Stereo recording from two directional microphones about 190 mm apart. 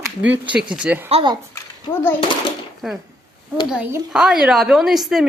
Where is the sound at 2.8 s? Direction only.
Centre (ahead or behind).